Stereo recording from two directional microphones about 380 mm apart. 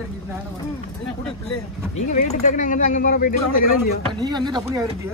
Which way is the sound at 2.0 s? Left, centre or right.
Centre.